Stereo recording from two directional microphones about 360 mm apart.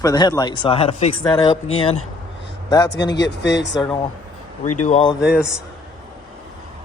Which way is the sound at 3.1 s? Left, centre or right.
Left.